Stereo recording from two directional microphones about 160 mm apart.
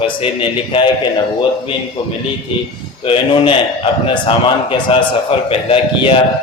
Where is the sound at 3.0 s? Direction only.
35° left (ahead or behind).